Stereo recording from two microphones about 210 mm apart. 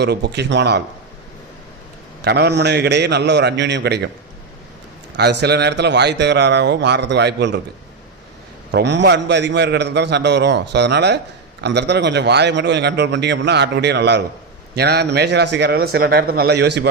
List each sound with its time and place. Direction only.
0.0 s a man's voice: 50° right (ahead or behind)
2.2 s a man's voice: 50° right (ahead or behind)
5.1 s a man's voice: 55° right (ahead or behind)
8.7 s a man's voice: 55° right (ahead or behind)